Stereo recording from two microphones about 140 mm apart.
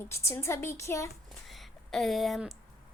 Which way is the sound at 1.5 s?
Centre (ahead or behind).